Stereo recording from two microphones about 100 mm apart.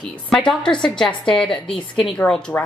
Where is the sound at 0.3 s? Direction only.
5° left (ahead or behind).